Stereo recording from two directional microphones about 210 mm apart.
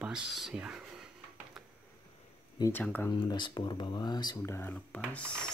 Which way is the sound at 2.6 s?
10° left (ahead or behind).